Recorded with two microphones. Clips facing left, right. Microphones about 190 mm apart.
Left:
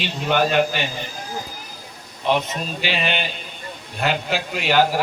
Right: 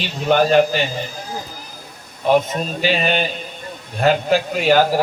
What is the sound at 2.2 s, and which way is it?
A man's voice, 45° right (ahead or behind).